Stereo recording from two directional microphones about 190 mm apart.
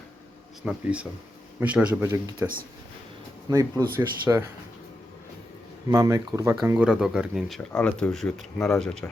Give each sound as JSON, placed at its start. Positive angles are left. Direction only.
{"t": 0.6, "sound": "speech", "side_deg": -5}
{"t": 3.5, "sound": "speech", "side_deg": -15}
{"t": 5.9, "sound": "speech", "side_deg": -15}